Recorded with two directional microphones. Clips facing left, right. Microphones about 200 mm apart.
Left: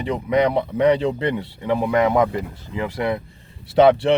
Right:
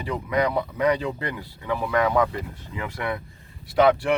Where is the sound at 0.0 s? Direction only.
20° left (ahead or behind).